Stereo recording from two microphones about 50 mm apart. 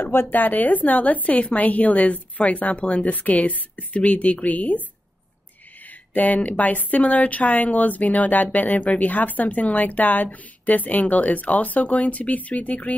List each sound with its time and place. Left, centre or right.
0.0 s speech: left
0.3 s speech: left
5.9 s speech: left